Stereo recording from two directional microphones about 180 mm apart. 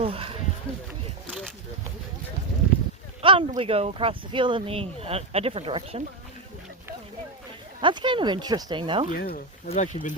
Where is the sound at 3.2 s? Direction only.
30° right (ahead or behind).